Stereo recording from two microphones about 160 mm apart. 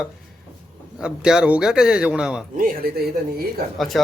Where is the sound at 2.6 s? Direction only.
70° right (ahead or behind).